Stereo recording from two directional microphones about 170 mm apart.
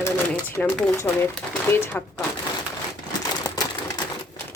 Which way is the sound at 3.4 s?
25° left (ahead or behind).